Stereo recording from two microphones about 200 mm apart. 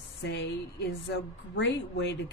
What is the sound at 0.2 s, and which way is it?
Speech, 55° left (ahead or behind).